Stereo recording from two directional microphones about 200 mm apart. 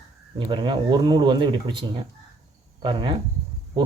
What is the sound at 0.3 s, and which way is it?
Speech, 25° right (ahead or behind).